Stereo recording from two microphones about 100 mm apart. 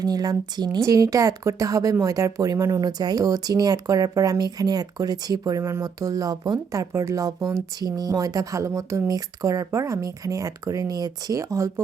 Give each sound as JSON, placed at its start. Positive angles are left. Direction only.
{"t": 0.0, "sound": "a woman's voice", "side_deg": -40}